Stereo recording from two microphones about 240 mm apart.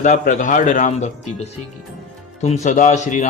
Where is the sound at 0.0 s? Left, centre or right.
Left.